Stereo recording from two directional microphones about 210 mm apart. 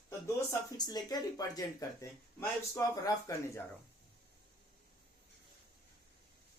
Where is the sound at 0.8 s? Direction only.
20° left (ahead or behind).